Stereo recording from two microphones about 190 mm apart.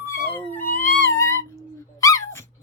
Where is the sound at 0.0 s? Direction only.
15° left (ahead or behind).